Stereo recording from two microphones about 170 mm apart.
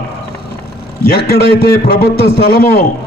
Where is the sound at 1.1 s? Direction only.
65° left (ahead or behind).